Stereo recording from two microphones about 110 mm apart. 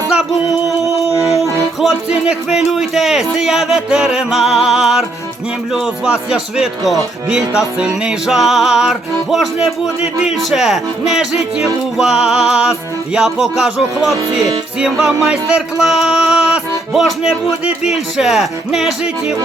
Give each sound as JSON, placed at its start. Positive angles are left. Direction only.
{"t": 1.2, "sound": "music", "side_deg": -30}
{"t": 1.8, "sound": "music", "side_deg": -5}